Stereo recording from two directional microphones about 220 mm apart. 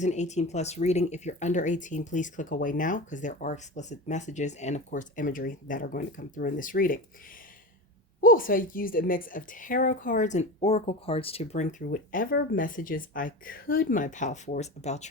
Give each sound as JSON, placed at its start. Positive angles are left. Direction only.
{"t": 0.0, "sound": "speech", "side_deg": 30}
{"t": 8.2, "sound": "speech", "side_deg": 40}